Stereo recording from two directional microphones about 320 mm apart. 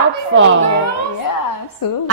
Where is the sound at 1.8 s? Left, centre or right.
Left.